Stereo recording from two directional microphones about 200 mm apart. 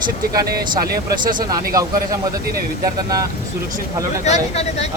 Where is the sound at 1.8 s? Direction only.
15° right (ahead or behind).